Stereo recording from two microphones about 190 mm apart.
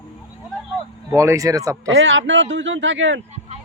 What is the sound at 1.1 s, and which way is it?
Speech, 15° right (ahead or behind).